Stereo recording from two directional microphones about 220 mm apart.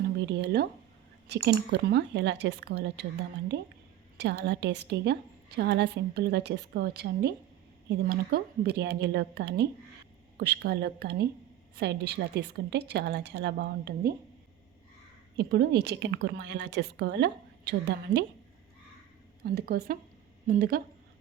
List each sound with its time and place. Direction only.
0.3 s a woman's voice: 50° right (ahead or behind)
4.2 s a woman's voice: 50° right (ahead or behind)
15.4 s a woman's voice: 50° right (ahead or behind)
19.5 s a woman's voice: 45° right (ahead or behind)